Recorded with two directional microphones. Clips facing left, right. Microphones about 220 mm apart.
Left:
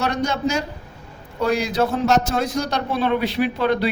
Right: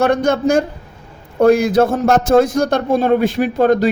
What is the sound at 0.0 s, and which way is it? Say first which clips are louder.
A man's voice: right 8 dB; 50° right (ahead or behind).